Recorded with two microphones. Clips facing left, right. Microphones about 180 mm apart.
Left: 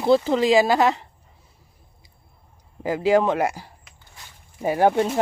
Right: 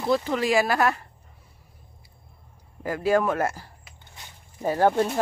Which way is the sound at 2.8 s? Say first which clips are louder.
Left 4 dB; 20° left (ahead or behind).